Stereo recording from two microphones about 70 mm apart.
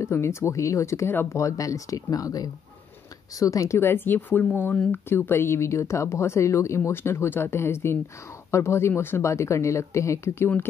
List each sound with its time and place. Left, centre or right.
0.0 s speech: left